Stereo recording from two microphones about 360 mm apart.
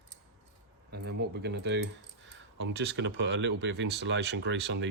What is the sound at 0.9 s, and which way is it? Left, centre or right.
Speech, right.